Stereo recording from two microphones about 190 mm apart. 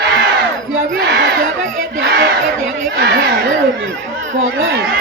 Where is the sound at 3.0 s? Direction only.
55° right (ahead or behind).